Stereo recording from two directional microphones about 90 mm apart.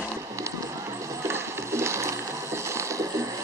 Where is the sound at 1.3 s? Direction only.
30° right (ahead or behind).